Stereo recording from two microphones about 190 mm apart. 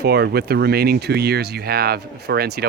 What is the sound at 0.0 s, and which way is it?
Speech, 60° right (ahead or behind).